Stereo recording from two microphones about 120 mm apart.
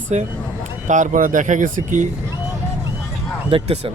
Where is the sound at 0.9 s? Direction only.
90° right.